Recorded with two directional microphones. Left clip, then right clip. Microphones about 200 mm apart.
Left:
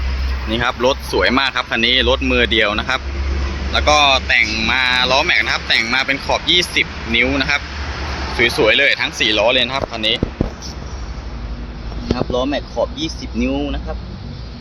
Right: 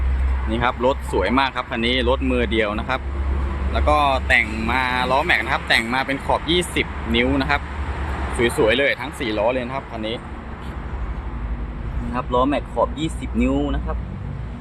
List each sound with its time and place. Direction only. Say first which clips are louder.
0.5 s speech: left 3 dB; 5° right (ahead or behind)
12.1 s speech: even; 10° right (ahead or behind)